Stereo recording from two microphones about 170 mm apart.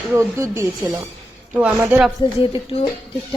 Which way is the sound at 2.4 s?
30° left (ahead or behind).